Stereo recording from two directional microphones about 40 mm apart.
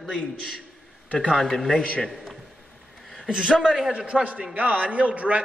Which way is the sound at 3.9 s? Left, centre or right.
Right.